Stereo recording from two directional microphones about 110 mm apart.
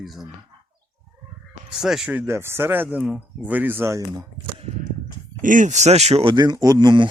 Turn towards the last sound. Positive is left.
turn(degrees=-40)  # may be behind; listen again after turning